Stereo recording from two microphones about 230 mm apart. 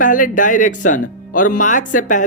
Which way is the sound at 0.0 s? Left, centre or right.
Left.